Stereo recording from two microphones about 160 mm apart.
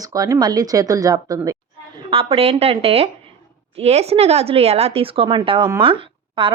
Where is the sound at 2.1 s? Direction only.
35° right (ahead or behind).